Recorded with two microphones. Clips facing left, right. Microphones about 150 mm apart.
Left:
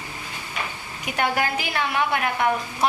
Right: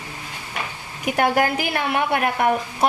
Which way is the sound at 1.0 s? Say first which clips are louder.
Right 5 dB; 50° right (ahead or behind).